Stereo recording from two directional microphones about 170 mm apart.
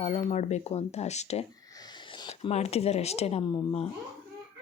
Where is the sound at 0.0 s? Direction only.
35° left (ahead or behind).